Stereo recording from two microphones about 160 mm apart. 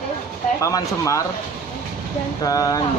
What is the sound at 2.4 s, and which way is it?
Speech, 20° left (ahead or behind).